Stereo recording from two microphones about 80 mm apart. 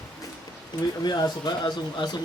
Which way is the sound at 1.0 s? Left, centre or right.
Left.